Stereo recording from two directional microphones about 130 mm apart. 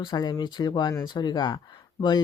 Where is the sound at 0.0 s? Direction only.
35° left (ahead or behind).